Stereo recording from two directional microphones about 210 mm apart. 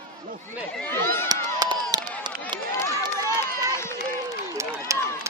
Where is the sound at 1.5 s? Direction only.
20° right (ahead or behind).